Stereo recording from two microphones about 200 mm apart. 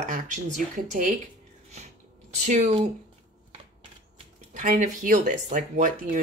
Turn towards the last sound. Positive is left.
turn(degrees=-40)  # may be behind; listen again after turning